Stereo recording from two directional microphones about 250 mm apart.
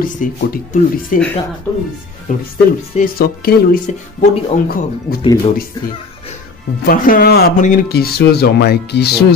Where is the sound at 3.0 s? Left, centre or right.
Left.